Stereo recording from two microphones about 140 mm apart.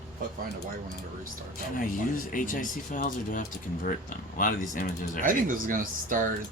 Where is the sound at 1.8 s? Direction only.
75° left (ahead or behind).